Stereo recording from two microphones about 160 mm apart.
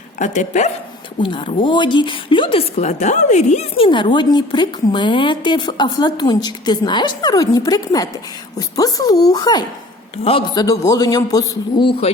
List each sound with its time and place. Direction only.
0.2 s speech: 50° left (ahead or behind)
1.2 s speech: 30° left (ahead or behind)
3.8 s a woman's voice: 30° left (ahead or behind)